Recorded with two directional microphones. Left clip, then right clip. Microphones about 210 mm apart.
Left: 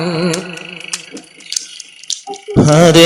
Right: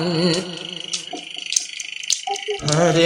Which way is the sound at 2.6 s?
40° left (ahead or behind).